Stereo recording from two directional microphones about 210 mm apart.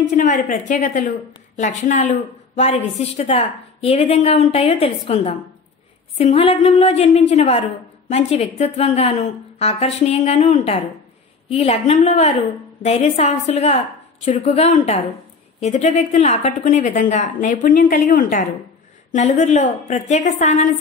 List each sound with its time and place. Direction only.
0.1 s speech: 35° left (ahead or behind)